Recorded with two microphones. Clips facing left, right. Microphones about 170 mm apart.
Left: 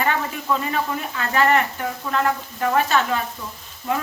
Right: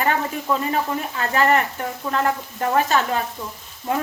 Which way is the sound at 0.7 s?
35° right (ahead or behind).